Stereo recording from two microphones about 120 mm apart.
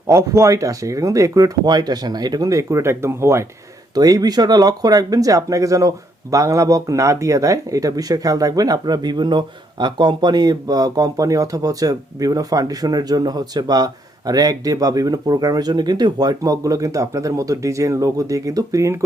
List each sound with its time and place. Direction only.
0.1 s speech: 25° right (ahead or behind)
3.9 s speech: 30° right (ahead or behind)